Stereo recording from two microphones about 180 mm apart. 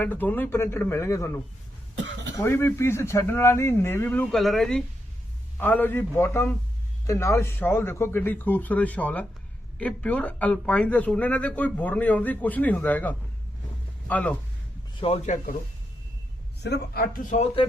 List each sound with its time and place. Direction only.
0.0 s speech: 10° left (ahead or behind)
15.0 s a man's voice: 35° left (ahead or behind)
16.6 s speech: 65° left (ahead or behind); by 17.4 s 45° left (ahead or behind)